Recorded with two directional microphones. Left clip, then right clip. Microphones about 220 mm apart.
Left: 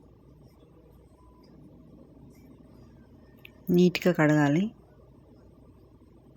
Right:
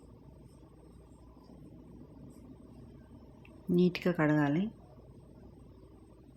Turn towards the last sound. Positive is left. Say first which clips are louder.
# left 6 dB
turn(degrees=25)  # may be behind; listen again after turning